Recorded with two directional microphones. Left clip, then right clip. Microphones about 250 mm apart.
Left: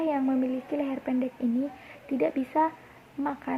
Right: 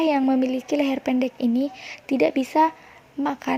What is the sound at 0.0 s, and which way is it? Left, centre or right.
Speech, right.